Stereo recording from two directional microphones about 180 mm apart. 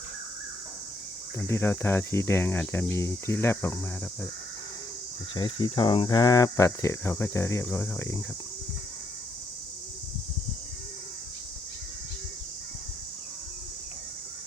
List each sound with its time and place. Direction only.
1.4 s speech: 15° left (ahead or behind)
5.3 s speech: 25° left (ahead or behind)